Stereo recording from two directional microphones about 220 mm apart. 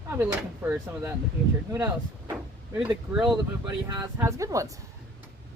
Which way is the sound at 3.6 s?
15° right (ahead or behind).